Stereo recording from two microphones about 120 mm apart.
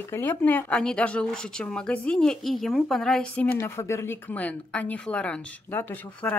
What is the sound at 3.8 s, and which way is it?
Speech, 25° left (ahead or behind).